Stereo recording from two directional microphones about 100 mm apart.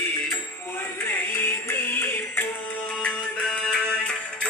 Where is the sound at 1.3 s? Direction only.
20° left (ahead or behind).